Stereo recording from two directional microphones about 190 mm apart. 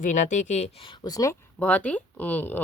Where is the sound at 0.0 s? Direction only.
40° left (ahead or behind).